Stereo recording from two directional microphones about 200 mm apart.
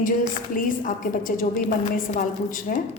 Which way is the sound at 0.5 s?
45° left (ahead or behind).